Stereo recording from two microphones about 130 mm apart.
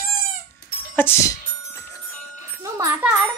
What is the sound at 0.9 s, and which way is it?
Speech, 15° left (ahead or behind).